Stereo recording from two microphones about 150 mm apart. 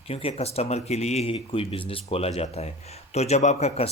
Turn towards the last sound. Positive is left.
turn(degrees=50)  # may be behind; listen again after turning